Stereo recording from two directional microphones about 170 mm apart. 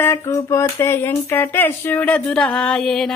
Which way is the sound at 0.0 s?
15° left (ahead or behind).